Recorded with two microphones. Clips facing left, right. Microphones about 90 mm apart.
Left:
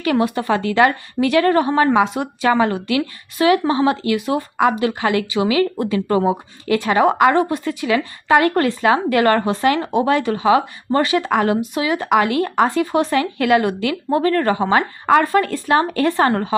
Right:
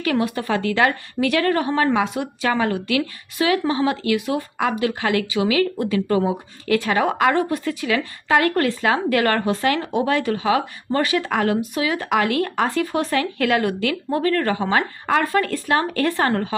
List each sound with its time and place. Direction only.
0.0 s speech: 25° left (ahead or behind)
6.7 s speech: 25° left (ahead or behind)
12.0 s speech: 10° left (ahead or behind); by 16.6 s 30° left (ahead or behind)